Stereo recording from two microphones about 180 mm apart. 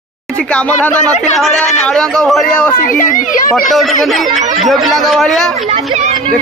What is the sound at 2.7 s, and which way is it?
Speech, 50° left (ahead or behind).